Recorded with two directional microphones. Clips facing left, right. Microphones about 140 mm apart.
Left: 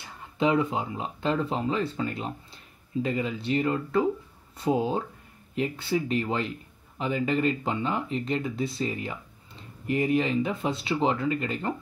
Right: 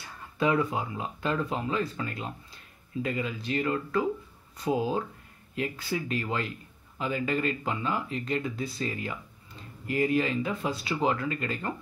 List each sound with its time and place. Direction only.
0.4 s speech: 20° left (ahead or behind)